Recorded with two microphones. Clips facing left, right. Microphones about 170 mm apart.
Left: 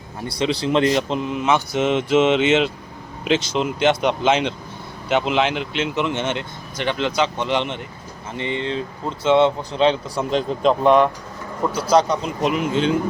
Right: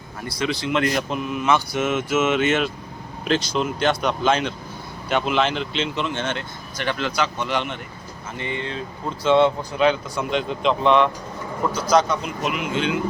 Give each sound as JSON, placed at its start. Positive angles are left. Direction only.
{"t": 0.3, "sound": "speech", "side_deg": 30}
{"t": 11.7, "sound": "speech", "side_deg": 30}